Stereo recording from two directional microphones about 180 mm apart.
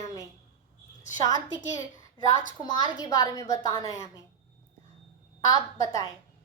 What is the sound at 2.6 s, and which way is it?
A woman's voice, 25° left (ahead or behind).